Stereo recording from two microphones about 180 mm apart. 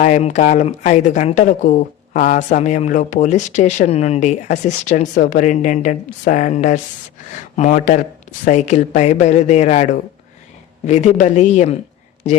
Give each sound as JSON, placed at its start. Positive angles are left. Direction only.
{"t": 0.0, "sound": "speech", "side_deg": 40}